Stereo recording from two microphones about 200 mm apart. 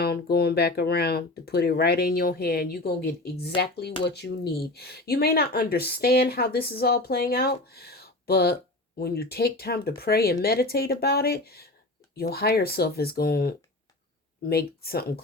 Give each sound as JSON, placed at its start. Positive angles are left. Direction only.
{"t": 0.0, "sound": "speech", "side_deg": 50}